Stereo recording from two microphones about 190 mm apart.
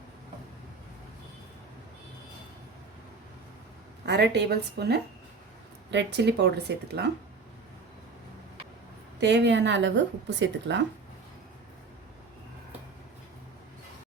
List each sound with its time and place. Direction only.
4.0 s speech: 60° right (ahead or behind)
9.2 s speech: 65° right (ahead or behind)